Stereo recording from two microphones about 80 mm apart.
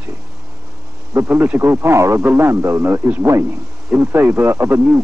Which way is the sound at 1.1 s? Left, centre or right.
Right.